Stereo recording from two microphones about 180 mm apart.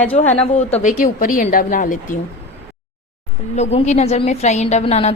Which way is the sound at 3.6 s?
40° left (ahead or behind).